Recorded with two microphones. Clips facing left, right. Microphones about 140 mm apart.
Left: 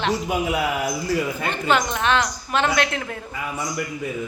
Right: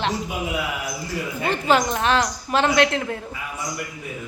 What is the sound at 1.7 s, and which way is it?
A woman's voice, 35° right (ahead or behind).